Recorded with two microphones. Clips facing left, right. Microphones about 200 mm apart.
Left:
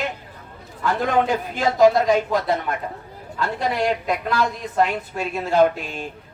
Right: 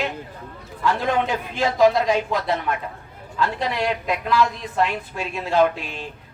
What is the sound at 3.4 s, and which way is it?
A woman's voice, 45° left (ahead or behind).